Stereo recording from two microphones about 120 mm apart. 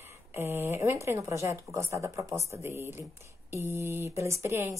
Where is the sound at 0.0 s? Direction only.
20° right (ahead or behind).